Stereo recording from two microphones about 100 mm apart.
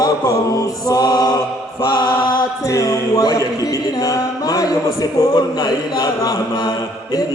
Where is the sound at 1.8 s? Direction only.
50° left (ahead or behind).